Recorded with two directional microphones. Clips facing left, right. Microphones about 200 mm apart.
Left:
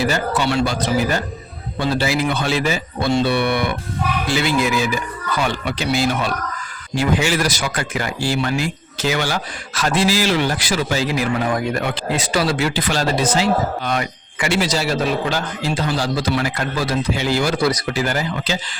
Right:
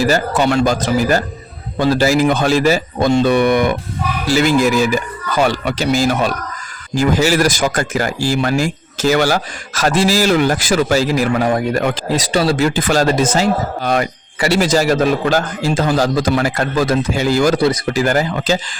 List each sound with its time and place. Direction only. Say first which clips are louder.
0.0 s speech: right 5 dB; 45° right (ahead or behind)
12.6 s speech: right 6 dB; 45° right (ahead or behind)
17.6 s speech: right 4 dB; 25° right (ahead or behind)
17.9 s speech: right 6 dB; 50° right (ahead or behind)